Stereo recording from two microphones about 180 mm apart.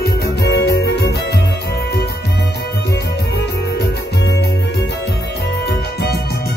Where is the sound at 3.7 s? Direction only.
65° left (ahead or behind).